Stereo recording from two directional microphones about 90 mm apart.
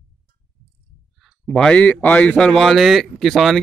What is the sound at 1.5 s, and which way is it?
Speech, 10° left (ahead or behind).